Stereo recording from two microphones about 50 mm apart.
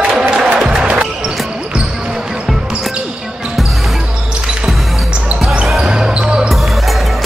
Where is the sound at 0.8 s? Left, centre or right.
Centre.